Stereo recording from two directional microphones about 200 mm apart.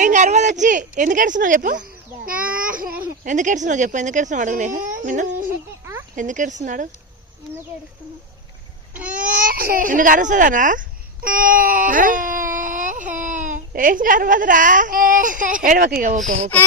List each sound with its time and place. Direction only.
0.0 s a child's voice: 40° right (ahead or behind)
5.8 s a sound: 10° right (ahead or behind)
6.1 s speech: 40° right (ahead or behind)
8.9 s babbling: 5° right (ahead or behind)
9.2 s speech: 45° right (ahead or behind)